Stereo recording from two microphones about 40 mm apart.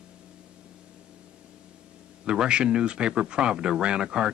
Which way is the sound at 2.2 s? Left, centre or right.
Right.